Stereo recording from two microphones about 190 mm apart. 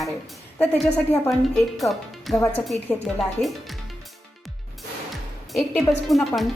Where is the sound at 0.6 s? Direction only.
10° left (ahead or behind).